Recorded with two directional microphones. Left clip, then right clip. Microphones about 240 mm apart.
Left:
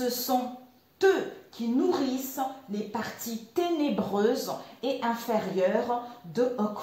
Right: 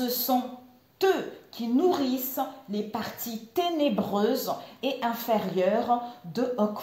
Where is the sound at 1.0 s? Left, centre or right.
Right.